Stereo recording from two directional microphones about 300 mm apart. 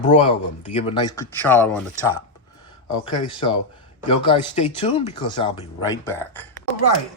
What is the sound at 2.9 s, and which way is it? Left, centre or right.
Speech, centre.